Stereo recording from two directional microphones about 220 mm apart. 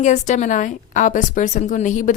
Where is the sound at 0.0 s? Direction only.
35° left (ahead or behind).